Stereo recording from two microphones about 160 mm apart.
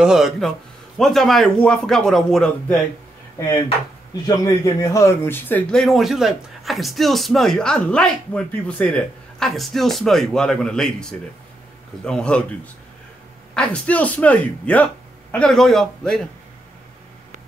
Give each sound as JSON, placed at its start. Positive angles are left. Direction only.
{"t": 0.0, "sound": "speech", "side_deg": -5}
{"t": 4.3, "sound": "a man's voice", "side_deg": 20}
{"t": 5.8, "sound": "a man's voice", "side_deg": 0}
{"t": 13.6, "sound": "a man's voice", "side_deg": 10}